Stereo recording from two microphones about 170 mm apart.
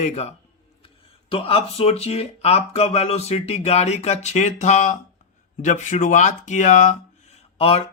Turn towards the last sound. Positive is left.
turn(degrees=35)  # may be behind; listen again after turning